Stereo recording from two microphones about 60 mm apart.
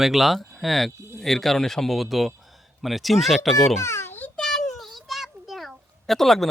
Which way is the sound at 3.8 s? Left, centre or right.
Left.